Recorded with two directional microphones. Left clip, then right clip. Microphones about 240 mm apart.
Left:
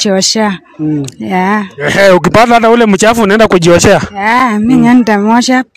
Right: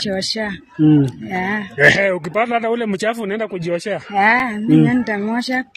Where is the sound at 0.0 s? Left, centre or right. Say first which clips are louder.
Left 11 dB; left.